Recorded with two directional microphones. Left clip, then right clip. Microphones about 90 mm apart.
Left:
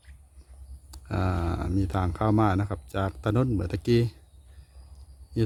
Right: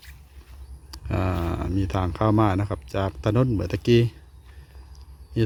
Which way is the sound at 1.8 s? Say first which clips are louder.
Right 4 dB; 25° left (ahead or behind).